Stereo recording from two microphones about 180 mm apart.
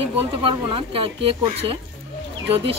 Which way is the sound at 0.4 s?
30° right (ahead or behind).